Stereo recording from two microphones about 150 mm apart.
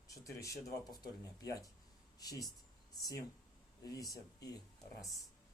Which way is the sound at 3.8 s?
25° left (ahead or behind).